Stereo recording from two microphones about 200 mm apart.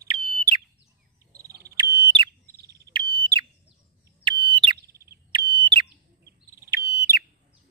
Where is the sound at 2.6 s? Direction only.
55° right (ahead or behind).